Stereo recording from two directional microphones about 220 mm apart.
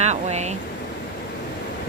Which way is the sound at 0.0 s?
30° right (ahead or behind).